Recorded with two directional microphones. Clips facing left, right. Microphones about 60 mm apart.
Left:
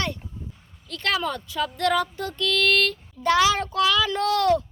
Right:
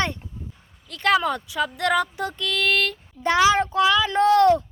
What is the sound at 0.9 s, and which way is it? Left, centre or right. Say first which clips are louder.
Speech: right 5 dB; centre.